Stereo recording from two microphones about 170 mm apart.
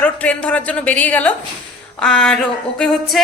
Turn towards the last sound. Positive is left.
turn(degrees=5)  # may be behind; listen again after turning